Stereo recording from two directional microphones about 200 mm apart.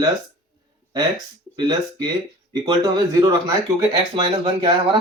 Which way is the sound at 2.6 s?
20° right (ahead or behind).